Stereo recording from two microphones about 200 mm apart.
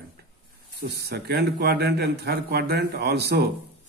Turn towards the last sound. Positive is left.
turn(degrees=-55)  # may be behind; listen again after turning